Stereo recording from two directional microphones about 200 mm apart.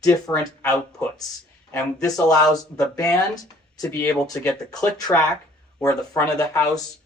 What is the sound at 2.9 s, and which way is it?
Speech, 15° left (ahead or behind).